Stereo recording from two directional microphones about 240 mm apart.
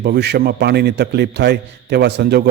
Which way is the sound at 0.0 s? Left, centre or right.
Right.